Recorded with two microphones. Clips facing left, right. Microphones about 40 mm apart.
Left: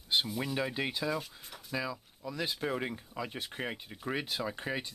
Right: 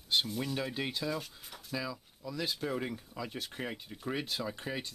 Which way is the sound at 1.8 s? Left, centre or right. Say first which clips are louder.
Left 2 dB; centre.